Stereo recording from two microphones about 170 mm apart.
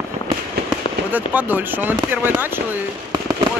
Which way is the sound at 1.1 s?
10° right (ahead or behind).